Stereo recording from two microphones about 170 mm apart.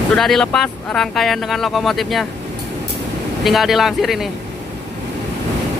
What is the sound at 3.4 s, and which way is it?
Speech, centre (ahead or behind).